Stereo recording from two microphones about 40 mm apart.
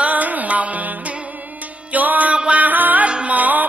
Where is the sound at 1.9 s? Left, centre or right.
Right.